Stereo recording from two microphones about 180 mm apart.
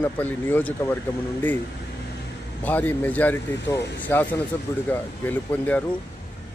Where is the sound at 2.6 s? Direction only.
10° left (ahead or behind).